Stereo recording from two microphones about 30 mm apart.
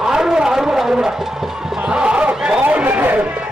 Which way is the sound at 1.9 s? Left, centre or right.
Right.